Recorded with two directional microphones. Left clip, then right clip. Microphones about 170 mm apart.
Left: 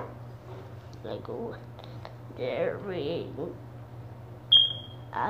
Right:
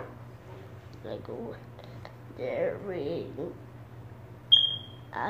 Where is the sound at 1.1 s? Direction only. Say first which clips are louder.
Left 2 dB; 5° right (ahead or behind).